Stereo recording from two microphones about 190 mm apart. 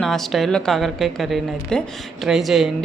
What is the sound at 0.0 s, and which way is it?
Speech, centre (ahead or behind).